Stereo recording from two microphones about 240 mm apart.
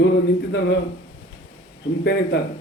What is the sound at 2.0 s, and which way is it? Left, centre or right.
Speech, left.